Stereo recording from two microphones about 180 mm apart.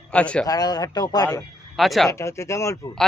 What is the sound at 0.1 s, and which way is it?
Speech, 5° left (ahead or behind).